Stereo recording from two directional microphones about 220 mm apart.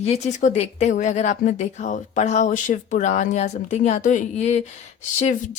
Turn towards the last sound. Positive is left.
turn(degrees=30)  # may be behind; listen again after turning